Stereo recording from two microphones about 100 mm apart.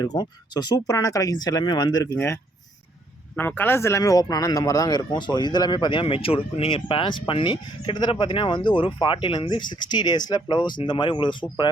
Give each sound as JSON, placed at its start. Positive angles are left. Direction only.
{"t": 0.0, "sound": "speech", "side_deg": 40}
{"t": 0.9, "sound": "speech", "side_deg": 35}
{"t": 2.1, "sound": "speech", "side_deg": 25}